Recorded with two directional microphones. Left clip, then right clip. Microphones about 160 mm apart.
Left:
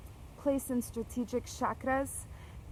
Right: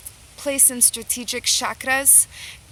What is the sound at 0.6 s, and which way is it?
Speech, 45° right (ahead or behind).